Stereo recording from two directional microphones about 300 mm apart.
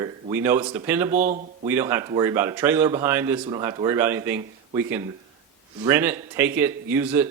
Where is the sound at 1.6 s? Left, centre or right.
Centre.